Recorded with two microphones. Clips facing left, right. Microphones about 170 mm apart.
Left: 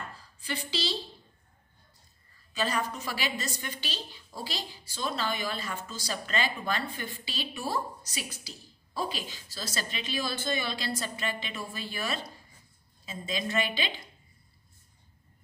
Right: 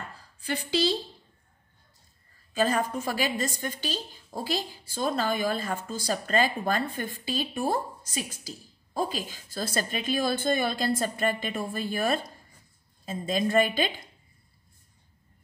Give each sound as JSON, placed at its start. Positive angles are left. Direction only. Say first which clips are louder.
{"t": 0.4, "sound": "a woman's voice", "louder": "right 7 dB", "side_deg": -55}
{"t": 2.5, "sound": "a woman's voice", "louder": "right 5 dB", "side_deg": -50}